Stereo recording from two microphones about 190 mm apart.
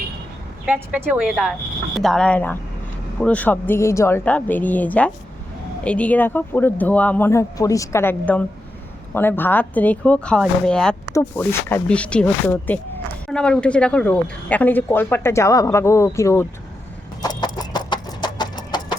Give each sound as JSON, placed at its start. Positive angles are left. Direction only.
{"t": 0.6, "sound": "speech", "side_deg": -10}
{"t": 17.2, "sound": "vehicle", "side_deg": 20}